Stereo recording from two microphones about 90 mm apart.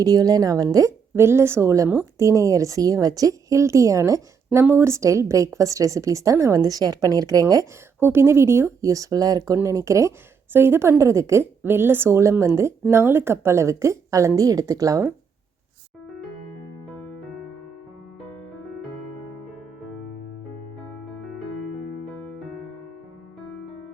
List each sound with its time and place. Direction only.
0.0 s speech: 45° right (ahead or behind)
1.1 s a woman's voice: 30° right (ahead or behind)
7.9 s a woman's voice: 25° right (ahead or behind)